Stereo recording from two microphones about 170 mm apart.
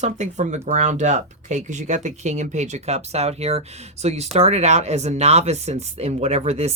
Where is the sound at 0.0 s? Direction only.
45° right (ahead or behind).